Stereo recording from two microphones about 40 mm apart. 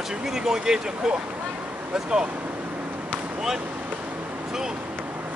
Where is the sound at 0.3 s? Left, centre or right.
Centre.